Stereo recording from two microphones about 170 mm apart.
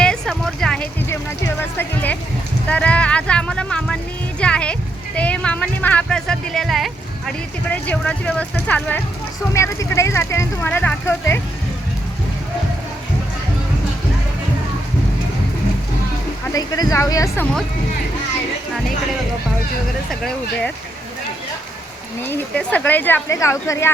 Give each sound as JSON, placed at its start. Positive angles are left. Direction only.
{"t": 0.0, "sound": "music", "side_deg": 5}
{"t": 2.6, "sound": "a sound", "side_deg": 5}
{"t": 8.6, "sound": "speech", "side_deg": 10}
{"t": 16.6, "sound": "speech", "side_deg": 20}
{"t": 20.1, "sound": "speech", "side_deg": 0}
{"t": 22.3, "sound": "speech", "side_deg": 10}